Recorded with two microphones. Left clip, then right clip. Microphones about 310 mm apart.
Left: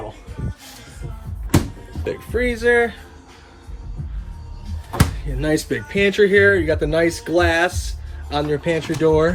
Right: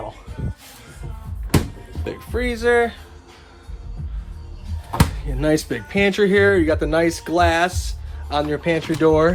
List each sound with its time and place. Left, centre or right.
2.0 s speech: centre
4.9 s speech: right